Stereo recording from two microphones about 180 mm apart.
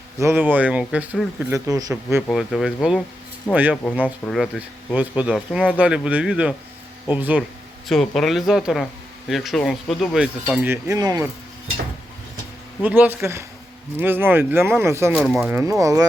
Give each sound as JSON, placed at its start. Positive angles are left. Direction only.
{"t": 0.2, "sound": "speech", "side_deg": -15}
{"t": 1.5, "sound": "speech", "side_deg": -15}
{"t": 2.2, "sound": "speech", "side_deg": 0}
{"t": 7.9, "sound": "speech", "side_deg": 0}
{"t": 10.5, "sound": "speech", "side_deg": -10}
{"t": 12.8, "sound": "speech", "side_deg": -10}
{"t": 15.5, "sound": "speech", "side_deg": -15}